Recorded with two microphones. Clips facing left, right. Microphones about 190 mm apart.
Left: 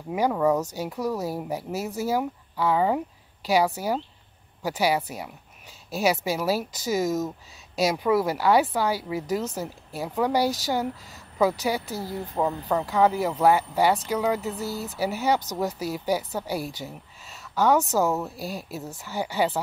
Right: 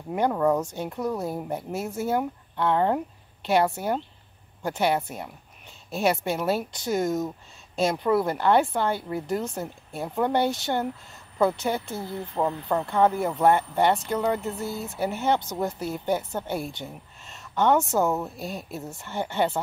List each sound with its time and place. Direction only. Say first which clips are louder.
0.1 s speech: even; centre (ahead or behind)
11.8 s speech: left 1 dB; 40° left (ahead or behind)
12.4 s speech: even; centre (ahead or behind)